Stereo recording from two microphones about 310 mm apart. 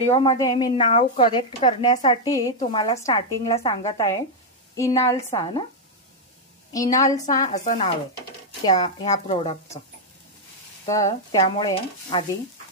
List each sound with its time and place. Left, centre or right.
0.0 s a woman's voice: centre
6.7 s a woman's voice: centre
7.4 s speech: left
8.6 s a woman's voice: centre
11.1 s a woman's voice: centre